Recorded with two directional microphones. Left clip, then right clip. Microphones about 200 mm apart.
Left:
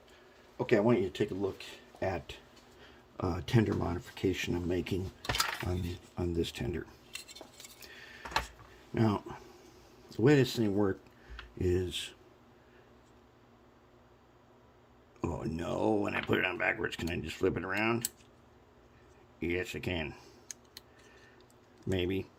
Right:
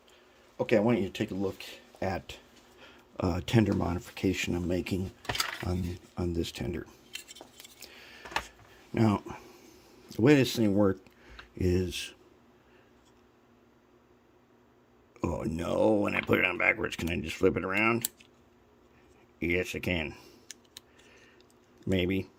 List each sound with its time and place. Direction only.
0.5 s speech: 25° right (ahead or behind)
6.1 s speech: 20° right (ahead or behind)
7.8 s keys jangling: 20° right (ahead or behind)
9.0 s speech: 30° right (ahead or behind)
15.2 s speech: 30° right (ahead or behind)
19.4 s speech: 30° right (ahead or behind)
21.8 s speech: 25° right (ahead or behind)